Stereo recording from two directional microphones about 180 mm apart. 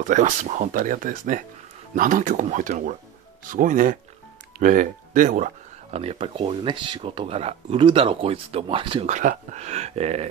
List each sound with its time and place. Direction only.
0.0 s speech: 45° right (ahead or behind); by 9.0 s 30° right (ahead or behind)
9.0 s speech: 45° right (ahead or behind)